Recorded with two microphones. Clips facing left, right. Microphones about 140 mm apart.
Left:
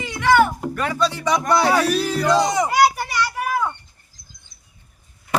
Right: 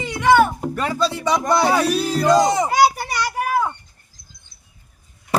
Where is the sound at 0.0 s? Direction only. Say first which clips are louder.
Right 2 dB; 20° right (ahead or behind).